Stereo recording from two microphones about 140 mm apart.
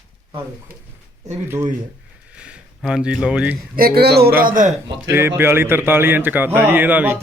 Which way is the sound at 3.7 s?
90° right.